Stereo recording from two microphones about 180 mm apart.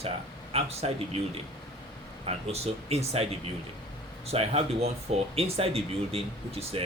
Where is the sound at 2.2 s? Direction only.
35° right (ahead or behind).